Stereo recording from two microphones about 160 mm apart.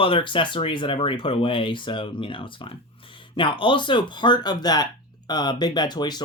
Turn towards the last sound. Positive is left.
turn(degrees=25)  # may be behind; listen again after turning